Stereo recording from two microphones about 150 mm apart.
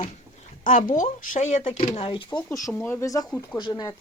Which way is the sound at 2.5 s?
20° left (ahead or behind).